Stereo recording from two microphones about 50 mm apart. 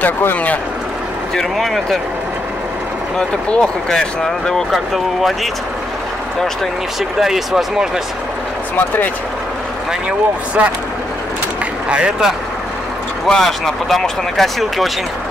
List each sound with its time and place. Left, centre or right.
0.2 s speech: left
1.3 s speech: centre
3.4 s speech: left
4.6 s speech: centre
7.2 s speech: centre
8.7 s speech: left
10.0 s speech: right
11.9 s speech: centre
13.3 s speech: centre